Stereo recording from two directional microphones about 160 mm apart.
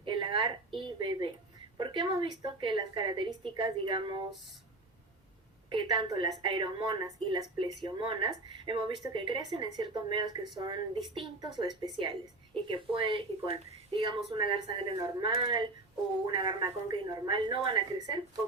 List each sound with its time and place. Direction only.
0.0 s a woman's voice: 30° right (ahead or behind)
5.6 s a woman's voice: 30° right (ahead or behind)